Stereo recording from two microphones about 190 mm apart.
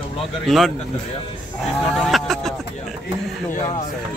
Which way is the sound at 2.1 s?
Centre (ahead or behind).